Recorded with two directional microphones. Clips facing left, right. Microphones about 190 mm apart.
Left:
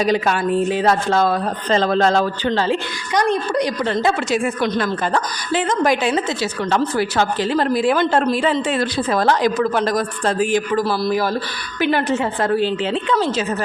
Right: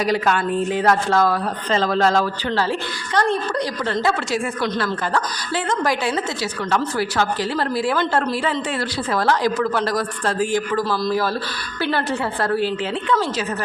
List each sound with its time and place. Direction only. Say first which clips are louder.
0.0 s a woman's voice: left 2 dB; 20° left (ahead or behind)